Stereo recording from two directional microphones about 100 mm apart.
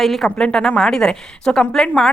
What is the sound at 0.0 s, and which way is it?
A woman's voice, centre (ahead or behind).